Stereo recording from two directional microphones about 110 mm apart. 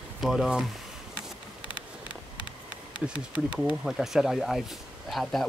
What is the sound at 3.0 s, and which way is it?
Speech, 10° right (ahead or behind).